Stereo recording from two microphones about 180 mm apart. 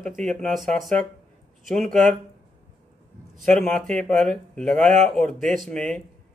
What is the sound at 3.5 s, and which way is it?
Speech, 5° left (ahead or behind).